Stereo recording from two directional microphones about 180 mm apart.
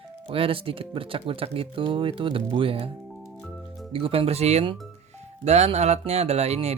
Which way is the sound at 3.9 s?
30° right (ahead or behind).